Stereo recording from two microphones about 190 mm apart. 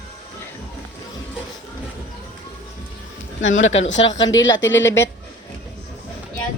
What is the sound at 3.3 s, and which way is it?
Speech, 40° left (ahead or behind).